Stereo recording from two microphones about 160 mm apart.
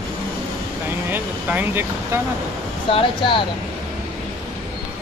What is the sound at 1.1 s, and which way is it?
Vehicle, 10° right (ahead or behind).